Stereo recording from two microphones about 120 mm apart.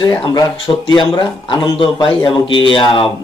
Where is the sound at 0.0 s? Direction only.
40° left (ahead or behind).